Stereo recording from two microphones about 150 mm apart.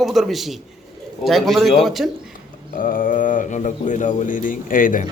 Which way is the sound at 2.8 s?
65° left (ahead or behind).